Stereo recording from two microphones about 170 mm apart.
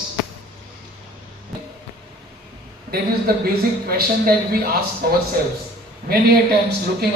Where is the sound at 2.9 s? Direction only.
65° right (ahead or behind).